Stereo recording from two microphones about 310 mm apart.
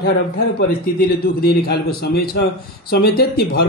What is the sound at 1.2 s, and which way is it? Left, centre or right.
A man's voice, left.